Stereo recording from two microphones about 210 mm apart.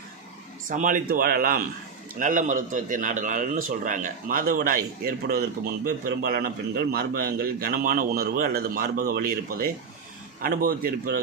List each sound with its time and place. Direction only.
0.7 s a man's voice: 40° right (ahead or behind)